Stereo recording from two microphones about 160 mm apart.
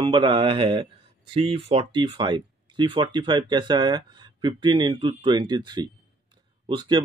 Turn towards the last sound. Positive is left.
turn(degrees=-30)  # may be behind; listen again after turning